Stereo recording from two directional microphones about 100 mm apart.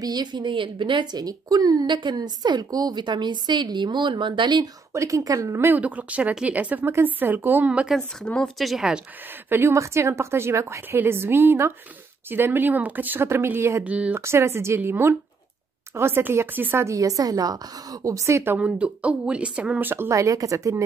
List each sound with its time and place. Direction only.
0.0 s a woman's voice: 45° right (ahead or behind)
4.9 s a woman's voice: 30° right (ahead or behind); by 7.9 s 15° right (ahead or behind)
7.9 s speech: 5° left (ahead or behind)
9.5 s a woman's voice: 25° right (ahead or behind)
13.8 s a woman's voice: 15° right (ahead or behind)
14.2 s a woman's voice: 25° right (ahead or behind)
18.6 s a woman's voice: 10° right (ahead or behind); by 20.8 s 35° right (ahead or behind)